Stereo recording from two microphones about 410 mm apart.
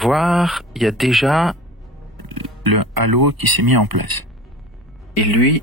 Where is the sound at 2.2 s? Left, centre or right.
Right.